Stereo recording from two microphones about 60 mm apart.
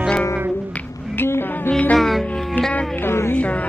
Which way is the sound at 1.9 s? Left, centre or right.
Centre.